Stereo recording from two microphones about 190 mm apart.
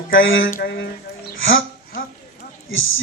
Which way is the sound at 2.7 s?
90° left.